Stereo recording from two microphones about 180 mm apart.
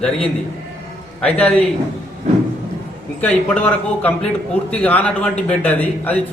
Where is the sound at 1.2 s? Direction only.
5° left (ahead or behind).